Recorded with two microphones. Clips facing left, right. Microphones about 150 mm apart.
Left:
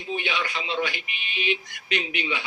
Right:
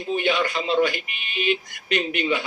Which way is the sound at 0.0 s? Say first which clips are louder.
Right 7 dB; 45° right (ahead or behind).